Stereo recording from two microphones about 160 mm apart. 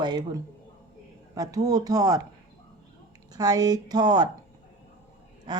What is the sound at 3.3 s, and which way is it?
Speech, 25° right (ahead or behind).